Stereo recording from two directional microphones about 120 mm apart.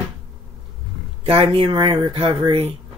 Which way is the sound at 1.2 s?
50° right (ahead or behind).